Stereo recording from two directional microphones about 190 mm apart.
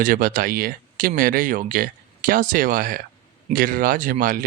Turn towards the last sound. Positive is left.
turn(degrees=-45)  # may be behind; listen again after turning